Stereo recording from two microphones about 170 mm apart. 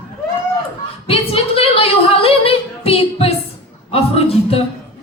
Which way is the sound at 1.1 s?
35° left (ahead or behind).